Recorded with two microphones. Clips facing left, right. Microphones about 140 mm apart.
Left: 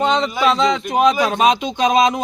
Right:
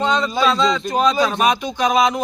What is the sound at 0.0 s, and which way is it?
Speech, 20° left (ahead or behind).